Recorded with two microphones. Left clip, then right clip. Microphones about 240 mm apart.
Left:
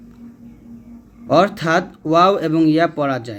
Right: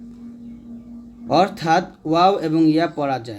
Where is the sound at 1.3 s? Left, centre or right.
Centre.